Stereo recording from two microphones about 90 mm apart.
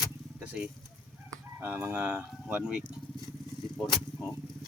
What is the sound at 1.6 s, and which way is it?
Speech, 20° right (ahead or behind).